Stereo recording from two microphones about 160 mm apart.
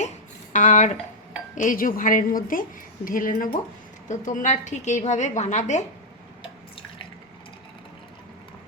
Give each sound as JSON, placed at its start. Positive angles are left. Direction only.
{"t": 0.5, "sound": "a woman's voice", "side_deg": 50}